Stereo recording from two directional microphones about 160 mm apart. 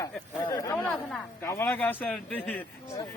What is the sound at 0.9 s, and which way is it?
A man's voice, 15° left (ahead or behind).